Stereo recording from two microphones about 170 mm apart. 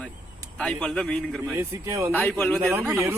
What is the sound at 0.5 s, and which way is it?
Speech, 5° left (ahead or behind).